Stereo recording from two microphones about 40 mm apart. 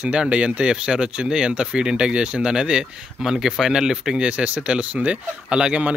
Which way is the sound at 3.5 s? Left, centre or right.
Centre.